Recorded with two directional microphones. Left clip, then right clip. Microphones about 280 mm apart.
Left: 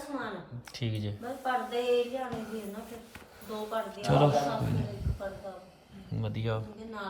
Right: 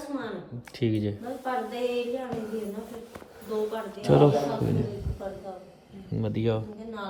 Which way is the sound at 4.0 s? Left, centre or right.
Centre.